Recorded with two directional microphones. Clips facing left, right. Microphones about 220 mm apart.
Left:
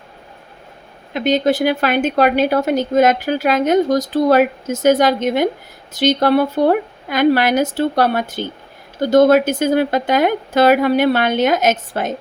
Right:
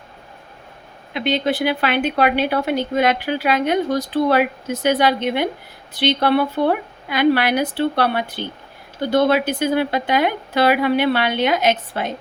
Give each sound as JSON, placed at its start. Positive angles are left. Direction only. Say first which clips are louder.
{"t": 1.1, "sound": "speech", "louder": "left 4 dB", "side_deg": 45}